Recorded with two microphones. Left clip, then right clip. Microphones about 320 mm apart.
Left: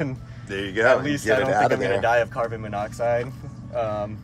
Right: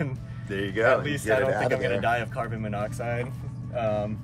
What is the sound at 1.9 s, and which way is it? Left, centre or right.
Speech, centre.